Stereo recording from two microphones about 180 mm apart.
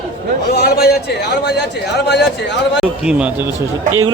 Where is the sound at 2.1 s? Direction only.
75° left (ahead or behind).